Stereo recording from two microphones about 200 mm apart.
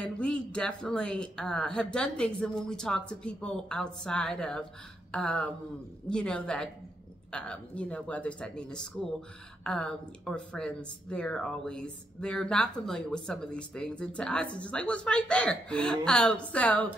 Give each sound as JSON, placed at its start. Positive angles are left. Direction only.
{"t": 0.0, "sound": "speech", "side_deg": 5}